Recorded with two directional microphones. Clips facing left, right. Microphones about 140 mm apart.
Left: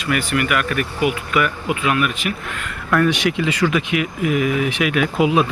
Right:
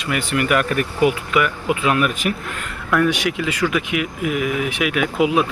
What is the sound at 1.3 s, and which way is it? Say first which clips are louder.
Speech: right 1 dB; 20° right (ahead or behind).